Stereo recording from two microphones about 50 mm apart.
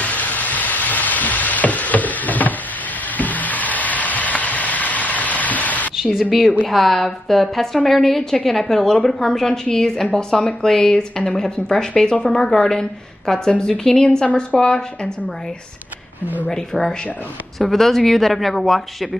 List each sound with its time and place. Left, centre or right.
0.0 s a sound: left
6.7 s a woman's voice: centre
17.6 s speech: centre